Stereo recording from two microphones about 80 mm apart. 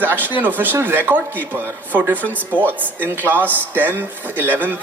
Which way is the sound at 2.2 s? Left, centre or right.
Centre.